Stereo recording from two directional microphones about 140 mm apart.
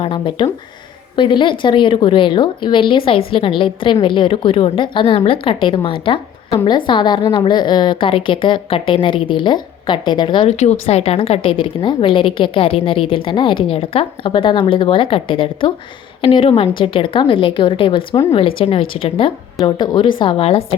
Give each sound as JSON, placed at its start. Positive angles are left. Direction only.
{"t": 0.0, "sound": "a woman's voice", "side_deg": 35}
{"t": 10.6, "sound": "a woman's voice", "side_deg": 50}